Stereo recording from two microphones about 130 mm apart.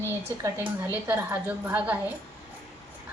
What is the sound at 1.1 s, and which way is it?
Speech, 15° right (ahead or behind).